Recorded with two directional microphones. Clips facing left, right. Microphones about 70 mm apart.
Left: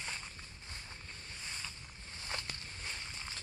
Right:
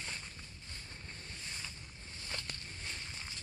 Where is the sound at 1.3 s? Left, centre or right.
Centre.